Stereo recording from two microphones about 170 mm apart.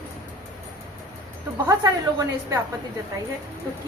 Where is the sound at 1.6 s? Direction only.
20° right (ahead or behind).